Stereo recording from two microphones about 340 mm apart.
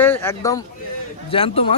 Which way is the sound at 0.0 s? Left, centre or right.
Centre.